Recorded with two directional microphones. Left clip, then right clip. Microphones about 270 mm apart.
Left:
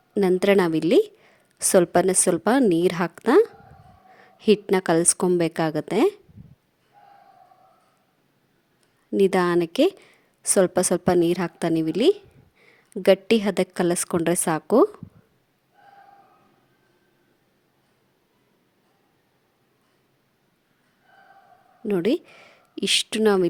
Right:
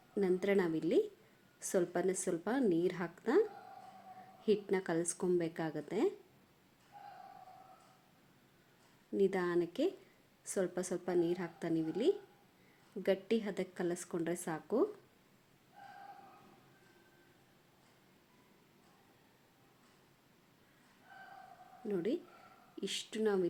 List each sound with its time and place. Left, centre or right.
0.1 s a woman's voice: left
9.1 s a woman's voice: left
21.8 s a woman's voice: left